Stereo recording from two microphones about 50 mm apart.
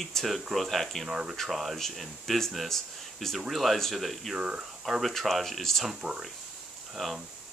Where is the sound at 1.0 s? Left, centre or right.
Centre.